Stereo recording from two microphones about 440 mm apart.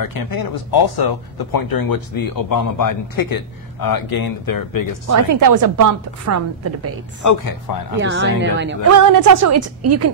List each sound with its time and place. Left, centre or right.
0.0 s speech: left
5.0 s a woman's voice: right
7.2 s speech: left
8.0 s speech: right
8.9 s a woman's voice: right